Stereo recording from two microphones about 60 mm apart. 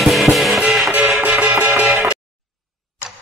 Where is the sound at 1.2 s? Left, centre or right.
Right.